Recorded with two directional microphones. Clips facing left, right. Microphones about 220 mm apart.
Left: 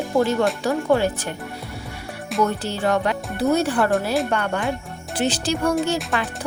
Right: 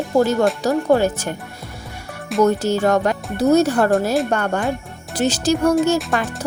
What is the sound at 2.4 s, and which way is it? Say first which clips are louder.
A woman's voice: right 7 dB; 45° right (ahead or behind).